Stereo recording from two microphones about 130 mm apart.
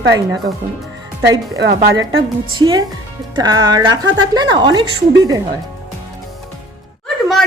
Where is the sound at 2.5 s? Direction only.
35° right (ahead or behind).